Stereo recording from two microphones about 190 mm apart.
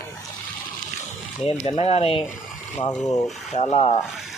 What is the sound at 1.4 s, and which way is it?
Speech, 35° left (ahead or behind).